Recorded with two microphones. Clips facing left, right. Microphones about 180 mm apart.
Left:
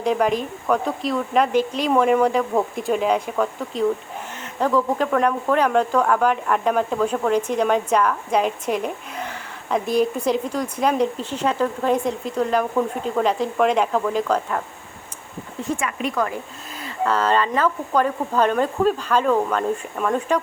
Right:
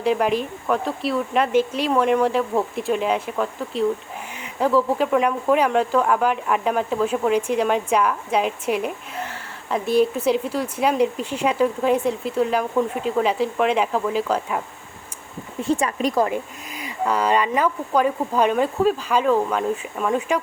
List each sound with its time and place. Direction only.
0.0 s speech: 5° right (ahead or behind)
15.6 s speech: 35° right (ahead or behind)
16.2 s speech: 15° right (ahead or behind)